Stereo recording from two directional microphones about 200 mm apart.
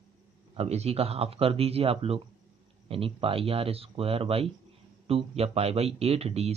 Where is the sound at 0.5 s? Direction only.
30° right (ahead or behind).